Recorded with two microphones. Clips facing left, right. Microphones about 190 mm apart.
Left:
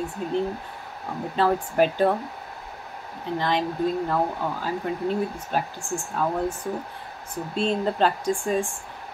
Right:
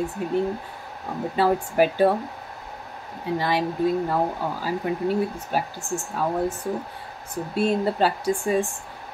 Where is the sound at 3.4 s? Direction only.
10° right (ahead or behind).